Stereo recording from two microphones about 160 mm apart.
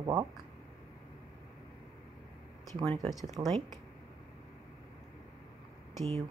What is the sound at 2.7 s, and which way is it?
Speech, 25° right (ahead or behind).